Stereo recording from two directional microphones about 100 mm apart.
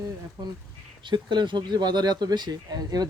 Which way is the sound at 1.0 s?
50° right (ahead or behind).